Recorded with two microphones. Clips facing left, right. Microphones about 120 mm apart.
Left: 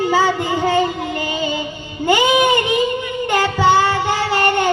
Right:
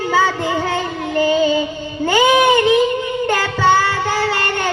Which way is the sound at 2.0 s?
15° left (ahead or behind).